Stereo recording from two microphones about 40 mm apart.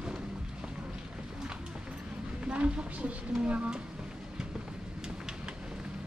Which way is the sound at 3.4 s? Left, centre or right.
Right.